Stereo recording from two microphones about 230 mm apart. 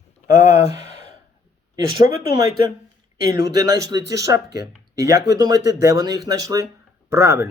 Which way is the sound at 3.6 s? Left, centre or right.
Centre.